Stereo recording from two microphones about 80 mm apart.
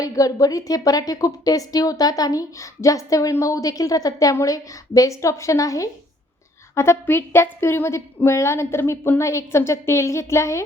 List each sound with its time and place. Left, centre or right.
0.0 s a woman's voice: left